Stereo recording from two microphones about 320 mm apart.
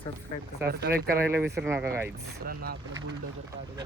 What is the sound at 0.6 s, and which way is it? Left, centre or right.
Speech, right.